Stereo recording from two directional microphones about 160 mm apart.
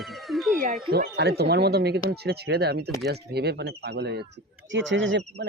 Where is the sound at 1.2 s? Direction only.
90° right.